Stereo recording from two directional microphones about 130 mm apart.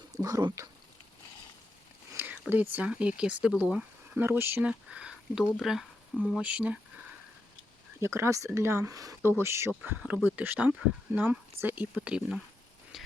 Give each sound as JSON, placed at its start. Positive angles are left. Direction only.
{"t": 0.1, "sound": "speech", "side_deg": -25}
{"t": 2.1, "sound": "speech", "side_deg": -10}
{"t": 8.0, "sound": "speech", "side_deg": -20}
{"t": 12.9, "sound": "a sound", "side_deg": -5}